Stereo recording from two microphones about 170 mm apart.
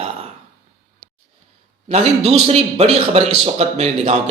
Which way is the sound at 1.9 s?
40° right (ahead or behind).